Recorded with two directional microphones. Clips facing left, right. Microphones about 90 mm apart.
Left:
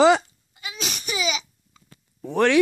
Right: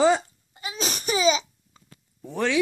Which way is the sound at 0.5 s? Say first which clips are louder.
Right 3 dB; 35° right (ahead or behind).